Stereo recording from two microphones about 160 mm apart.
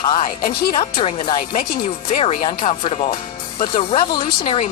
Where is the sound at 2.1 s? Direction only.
45° left (ahead or behind).